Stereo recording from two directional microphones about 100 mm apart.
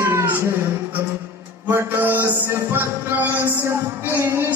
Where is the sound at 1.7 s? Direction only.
20° right (ahead or behind).